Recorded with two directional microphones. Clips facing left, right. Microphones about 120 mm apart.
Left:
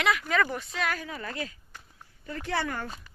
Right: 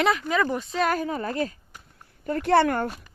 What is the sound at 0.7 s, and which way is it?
Speech, 40° right (ahead or behind).